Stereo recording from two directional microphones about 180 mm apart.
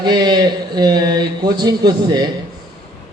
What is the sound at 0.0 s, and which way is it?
A man's voice, 25° right (ahead or behind).